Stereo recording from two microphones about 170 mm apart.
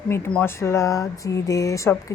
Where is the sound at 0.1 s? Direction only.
10° left (ahead or behind).